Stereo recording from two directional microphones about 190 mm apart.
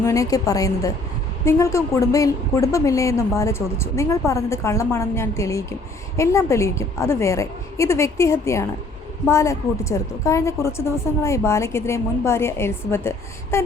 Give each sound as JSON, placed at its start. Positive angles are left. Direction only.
{"t": 0.0, "sound": "a woman's voice", "side_deg": 15}